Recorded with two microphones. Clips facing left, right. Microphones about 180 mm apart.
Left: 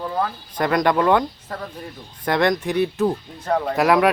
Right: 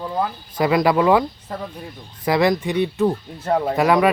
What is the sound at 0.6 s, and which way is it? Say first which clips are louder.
Speech: right 2 dB; 5° right (ahead or behind).